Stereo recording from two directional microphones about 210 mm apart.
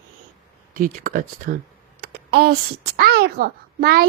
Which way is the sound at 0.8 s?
40° right (ahead or behind).